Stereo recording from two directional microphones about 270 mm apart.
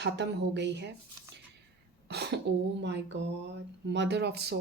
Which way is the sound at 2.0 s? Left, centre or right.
Right.